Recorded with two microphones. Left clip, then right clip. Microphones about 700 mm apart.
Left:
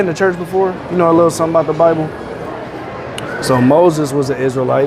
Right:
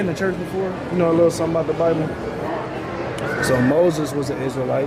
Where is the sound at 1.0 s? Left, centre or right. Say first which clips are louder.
Left 6 dB; left.